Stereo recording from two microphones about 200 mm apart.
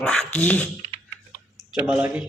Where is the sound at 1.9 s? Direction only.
5° right (ahead or behind).